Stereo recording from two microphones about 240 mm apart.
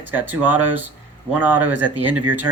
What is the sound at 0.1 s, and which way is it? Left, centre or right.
Speech, centre.